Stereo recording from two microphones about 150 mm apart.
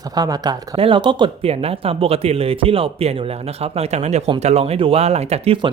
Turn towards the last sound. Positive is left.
turn(degrees=-40)  # may be behind; listen again after turning